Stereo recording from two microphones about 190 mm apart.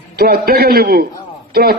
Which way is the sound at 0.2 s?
55° right (ahead or behind).